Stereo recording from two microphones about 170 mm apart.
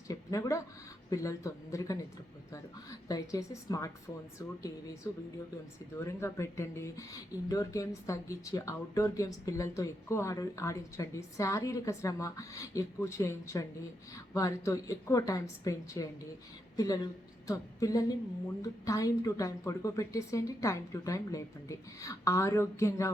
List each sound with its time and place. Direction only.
0.1 s a woman's voice: 20° left (ahead or behind)
3.1 s a woman's voice: 20° left (ahead or behind)
6.0 s a woman's voice: 15° left (ahead or behind)